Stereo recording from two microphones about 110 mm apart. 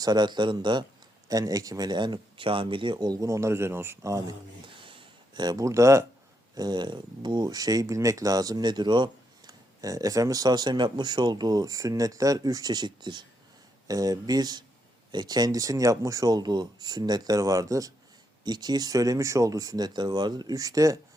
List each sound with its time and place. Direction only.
0.0 s speech: 40° right (ahead or behind)
1.3 s speech: 35° right (ahead or behind)
4.6 s a sound: 50° right (ahead or behind); by 6.1 s 30° right (ahead or behind)
6.6 s speech: 40° right (ahead or behind)
9.5 s speech: 35° right (ahead or behind)